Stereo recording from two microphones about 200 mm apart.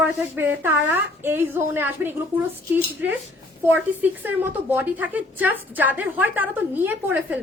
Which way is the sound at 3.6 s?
10° right (ahead or behind).